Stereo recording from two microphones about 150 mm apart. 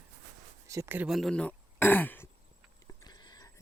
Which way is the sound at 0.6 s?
20° right (ahead or behind).